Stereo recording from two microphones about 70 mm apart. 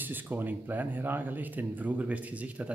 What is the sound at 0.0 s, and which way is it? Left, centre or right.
Speech, right.